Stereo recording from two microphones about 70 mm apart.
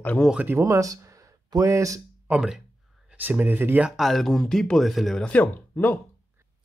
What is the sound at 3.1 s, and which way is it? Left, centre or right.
Speech, right.